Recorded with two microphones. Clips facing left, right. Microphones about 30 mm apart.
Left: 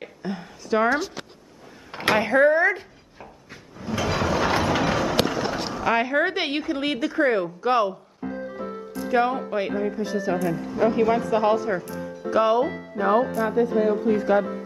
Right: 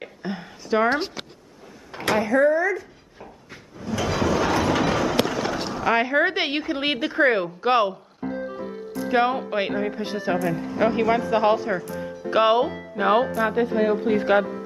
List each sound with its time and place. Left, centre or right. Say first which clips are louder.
0.2 s a sound: even; centre
0.8 s speech: even; right
1.9 s speech: left 1 dB; left
4.0 s a sound: right 1 dB; centre
4.6 s a sound: right 1 dB; centre
5.7 s a woman's voice: right 2 dB; centre
6.8 s a woman's voice: right 3 dB; right
9.1 s a woman's voice: right 1 dB; right
12.3 s speech: right 1 dB; right
13.6 s speech: left 2 dB; right